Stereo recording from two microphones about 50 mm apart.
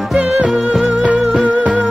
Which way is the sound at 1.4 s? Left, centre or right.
Right.